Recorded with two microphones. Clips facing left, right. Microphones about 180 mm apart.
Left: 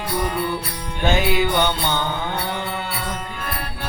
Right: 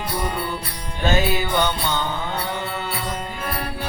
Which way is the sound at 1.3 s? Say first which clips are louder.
Left 2 dB; 20° left (ahead or behind).